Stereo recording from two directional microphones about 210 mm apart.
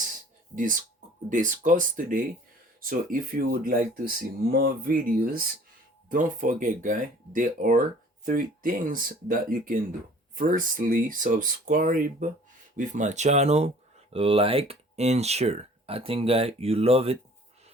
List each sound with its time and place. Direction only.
0.5 s speech: 40° right (ahead or behind)